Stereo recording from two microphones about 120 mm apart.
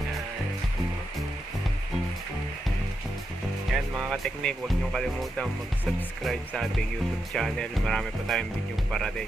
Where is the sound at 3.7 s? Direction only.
Centre (ahead or behind).